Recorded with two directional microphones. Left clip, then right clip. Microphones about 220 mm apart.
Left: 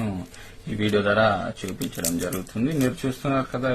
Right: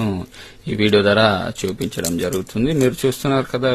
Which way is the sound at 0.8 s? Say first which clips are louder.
Right 6 dB; 50° right (ahead or behind).